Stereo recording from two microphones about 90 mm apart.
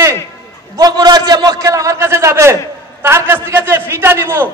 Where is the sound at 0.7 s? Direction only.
45° right (ahead or behind); by 2.5 s 30° right (ahead or behind).